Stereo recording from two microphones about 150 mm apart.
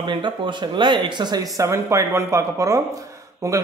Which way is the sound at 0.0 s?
30° right (ahead or behind).